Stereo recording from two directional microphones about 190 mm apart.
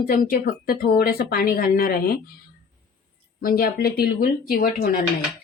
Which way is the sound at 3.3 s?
50° left (ahead or behind).